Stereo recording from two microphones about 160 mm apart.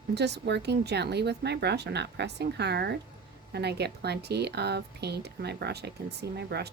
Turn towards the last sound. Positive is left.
turn(degrees=-90)